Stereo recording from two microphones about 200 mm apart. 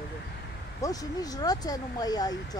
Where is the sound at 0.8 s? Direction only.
20° left (ahead or behind).